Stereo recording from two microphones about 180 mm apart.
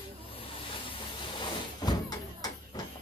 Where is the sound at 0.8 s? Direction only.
25° left (ahead or behind).